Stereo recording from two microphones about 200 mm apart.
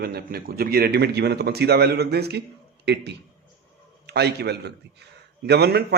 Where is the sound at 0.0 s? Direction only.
50° right (ahead or behind).